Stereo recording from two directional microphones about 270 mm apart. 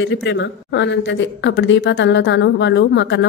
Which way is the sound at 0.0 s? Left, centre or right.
Left.